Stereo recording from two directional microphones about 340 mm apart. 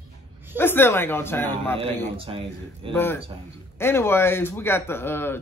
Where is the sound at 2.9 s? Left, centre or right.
Centre.